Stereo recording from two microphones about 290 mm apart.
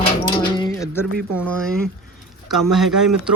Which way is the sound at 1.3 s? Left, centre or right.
Centre.